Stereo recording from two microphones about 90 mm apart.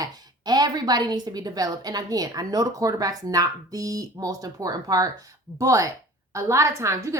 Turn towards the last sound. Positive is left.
turn(degrees=-35)  # may be behind; listen again after turning